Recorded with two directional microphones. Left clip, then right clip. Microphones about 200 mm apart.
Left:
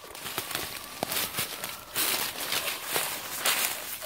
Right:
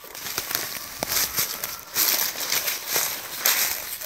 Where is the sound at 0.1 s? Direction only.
45° right (ahead or behind).